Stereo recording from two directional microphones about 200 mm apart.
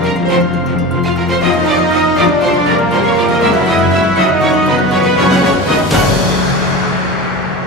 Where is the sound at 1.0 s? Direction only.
Centre (ahead or behind).